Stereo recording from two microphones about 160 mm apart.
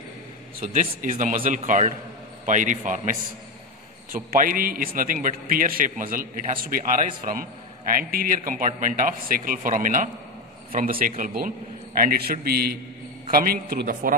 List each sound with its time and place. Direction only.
0.6 s a man's voice: 55° right (ahead or behind)
12.0 s a man's voice: 70° right (ahead or behind)